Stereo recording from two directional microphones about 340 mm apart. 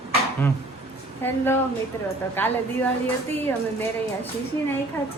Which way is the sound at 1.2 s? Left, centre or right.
Centre.